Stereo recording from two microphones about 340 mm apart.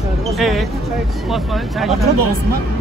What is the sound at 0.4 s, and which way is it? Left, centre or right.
Speech, centre.